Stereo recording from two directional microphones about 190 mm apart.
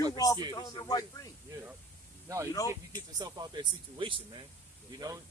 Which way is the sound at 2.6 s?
20° right (ahead or behind).